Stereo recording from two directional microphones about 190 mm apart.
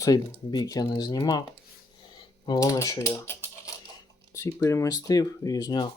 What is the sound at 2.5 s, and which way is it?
Speech, 20° left (ahead or behind).